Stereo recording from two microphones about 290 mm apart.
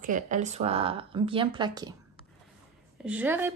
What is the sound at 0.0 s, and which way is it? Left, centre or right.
Speech, right.